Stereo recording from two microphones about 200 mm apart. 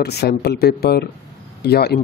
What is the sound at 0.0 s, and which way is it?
Speech, 55° left (ahead or behind).